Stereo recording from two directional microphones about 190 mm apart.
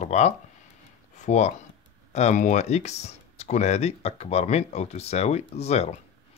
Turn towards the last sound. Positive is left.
turn(degrees=35)  # may be behind; listen again after turning